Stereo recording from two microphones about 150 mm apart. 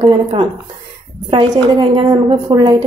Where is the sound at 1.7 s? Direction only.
30° right (ahead or behind).